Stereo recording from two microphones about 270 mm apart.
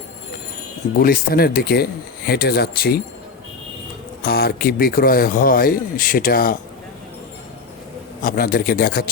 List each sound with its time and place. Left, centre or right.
0.9 s speech: left
4.2 s speech: left
8.2 s speech: left